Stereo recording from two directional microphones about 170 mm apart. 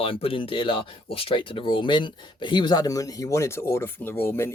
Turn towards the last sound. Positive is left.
turn(degrees=15)  # may be behind; listen again after turning